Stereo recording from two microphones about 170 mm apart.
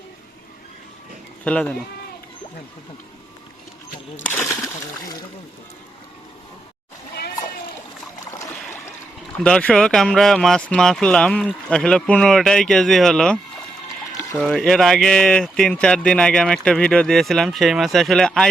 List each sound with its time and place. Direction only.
1.5 s speech: 10° left (ahead or behind)
4.2 s speech: 10° left (ahead or behind)
8.4 s a sound: 15° left (ahead or behind)
9.4 s speech: 5° left (ahead or behind)